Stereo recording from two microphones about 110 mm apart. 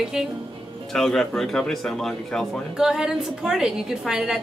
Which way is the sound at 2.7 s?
5° right (ahead or behind).